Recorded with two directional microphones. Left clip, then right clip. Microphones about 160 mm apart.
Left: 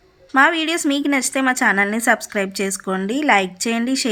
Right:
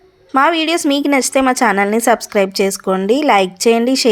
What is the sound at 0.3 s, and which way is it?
A woman's voice, 25° right (ahead or behind).